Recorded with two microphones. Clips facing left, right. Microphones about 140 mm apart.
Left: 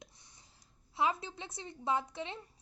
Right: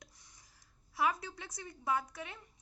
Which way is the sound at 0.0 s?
25° left (ahead or behind).